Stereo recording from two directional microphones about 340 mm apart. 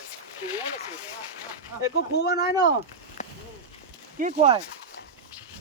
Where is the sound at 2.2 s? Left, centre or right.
Left.